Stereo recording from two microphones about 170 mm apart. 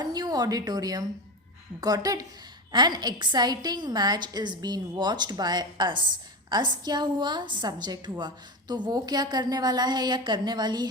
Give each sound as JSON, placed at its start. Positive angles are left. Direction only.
{"t": 0.0, "sound": "a woman's voice", "side_deg": -25}